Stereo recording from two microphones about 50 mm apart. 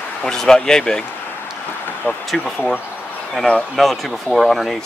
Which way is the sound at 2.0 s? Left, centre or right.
Left.